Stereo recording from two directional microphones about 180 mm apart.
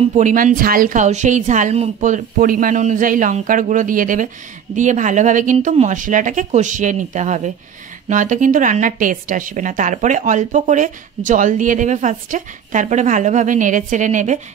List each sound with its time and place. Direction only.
0.1 s a woman's voice: 45° right (ahead or behind)